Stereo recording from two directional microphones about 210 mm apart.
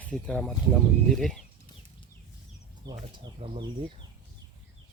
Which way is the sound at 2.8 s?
15° right (ahead or behind).